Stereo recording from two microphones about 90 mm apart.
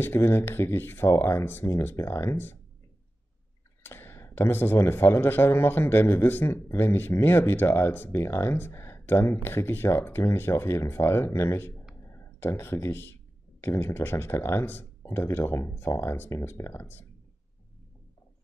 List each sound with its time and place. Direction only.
0.0 s speech: 25° left (ahead or behind)
3.8 s speech: 25° left (ahead or behind)